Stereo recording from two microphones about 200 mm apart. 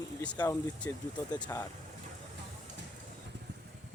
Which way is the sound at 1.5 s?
15° left (ahead or behind).